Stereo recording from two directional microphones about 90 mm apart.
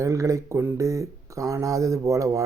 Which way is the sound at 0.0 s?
35° right (ahead or behind).